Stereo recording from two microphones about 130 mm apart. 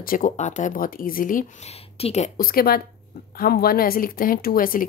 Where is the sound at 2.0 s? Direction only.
55° left (ahead or behind); by 2.5 s 80° left.